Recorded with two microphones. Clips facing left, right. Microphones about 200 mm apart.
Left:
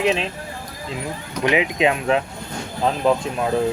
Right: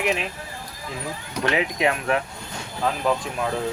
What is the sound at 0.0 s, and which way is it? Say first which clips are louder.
Speech: left 4 dB; 25° left (ahead or behind).